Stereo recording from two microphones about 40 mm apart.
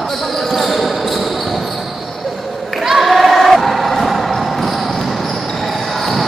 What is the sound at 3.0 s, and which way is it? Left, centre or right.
Basketball bounce, centre.